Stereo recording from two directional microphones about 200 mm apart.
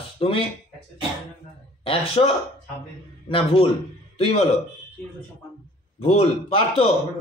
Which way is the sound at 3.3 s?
30° left (ahead or behind).